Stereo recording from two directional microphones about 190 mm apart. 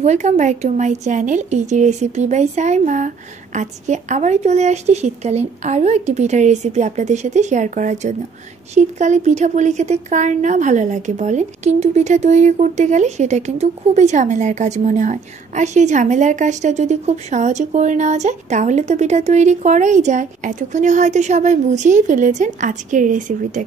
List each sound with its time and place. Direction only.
0.0 s speech: 40° right (ahead or behind)